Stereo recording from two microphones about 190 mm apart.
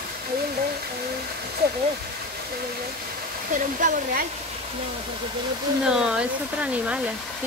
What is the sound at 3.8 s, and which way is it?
Hair dryer, 40° right (ahead or behind).